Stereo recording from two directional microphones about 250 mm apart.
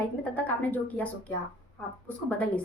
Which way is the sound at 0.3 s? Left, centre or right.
Centre.